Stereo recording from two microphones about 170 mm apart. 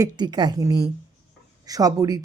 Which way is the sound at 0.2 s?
25° right (ahead or behind).